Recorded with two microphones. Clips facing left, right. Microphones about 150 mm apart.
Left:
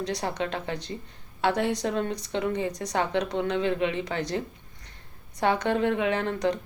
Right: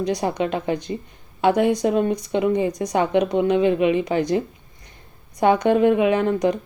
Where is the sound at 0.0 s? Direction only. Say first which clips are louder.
Right 7 dB; 15° right (ahead or behind).